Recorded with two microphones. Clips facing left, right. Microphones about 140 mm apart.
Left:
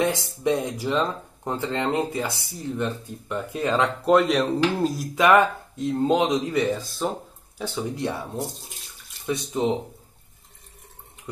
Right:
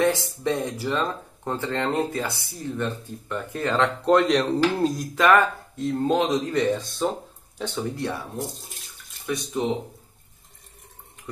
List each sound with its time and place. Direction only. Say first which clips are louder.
0.0 s speech: right 1 dB; 15° left (ahead or behind)
5.1 s speech: left 2 dB; 15° left (ahead or behind)
7.9 s speech: left 1 dB; 20° left (ahead or behind)